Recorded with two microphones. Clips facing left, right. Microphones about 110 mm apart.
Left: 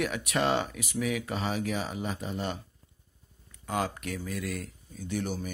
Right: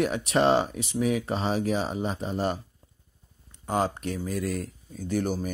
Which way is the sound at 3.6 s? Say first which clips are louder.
Right 5 dB; 30° right (ahead or behind).